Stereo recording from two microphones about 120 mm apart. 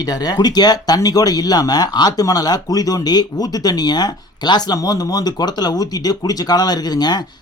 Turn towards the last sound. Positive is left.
turn(degrees=35)  # may be behind; listen again after turning